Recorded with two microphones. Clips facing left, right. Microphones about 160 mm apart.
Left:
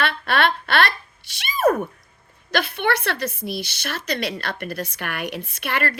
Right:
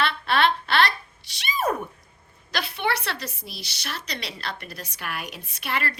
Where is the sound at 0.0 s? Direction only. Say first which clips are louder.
Left 1 dB; 60° left (ahead or behind).